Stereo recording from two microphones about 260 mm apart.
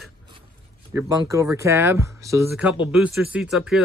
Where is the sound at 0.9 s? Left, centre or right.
Centre.